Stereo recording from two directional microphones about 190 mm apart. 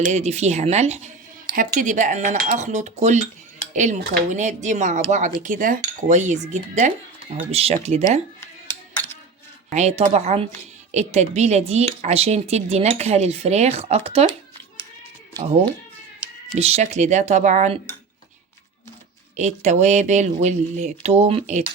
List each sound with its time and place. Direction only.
0.0 s speech: 35° right (ahead or behind)
9.7 s speech: 35° right (ahead or behind)
16.6 s speech: 35° right (ahead or behind)
19.4 s speech: 35° right (ahead or behind)